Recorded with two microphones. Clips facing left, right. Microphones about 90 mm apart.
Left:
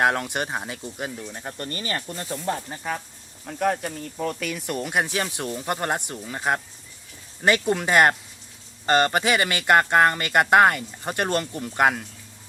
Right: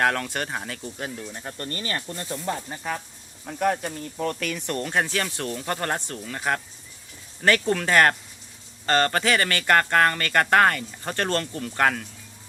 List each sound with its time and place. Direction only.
0.0 s speech: 20° left (ahead or behind)
2.6 s speech: centre (ahead or behind); by 12.0 s 15° left (ahead or behind)